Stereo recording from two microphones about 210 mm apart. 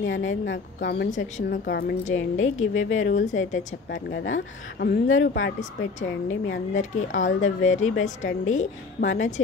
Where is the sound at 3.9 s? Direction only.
60° left (ahead or behind).